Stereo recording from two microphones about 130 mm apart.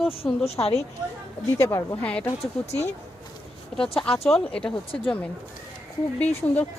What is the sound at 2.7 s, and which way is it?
Speech, 55° left (ahead or behind).